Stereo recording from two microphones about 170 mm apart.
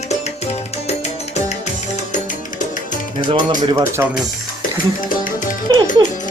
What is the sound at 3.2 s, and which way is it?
Speech, 25° right (ahead or behind).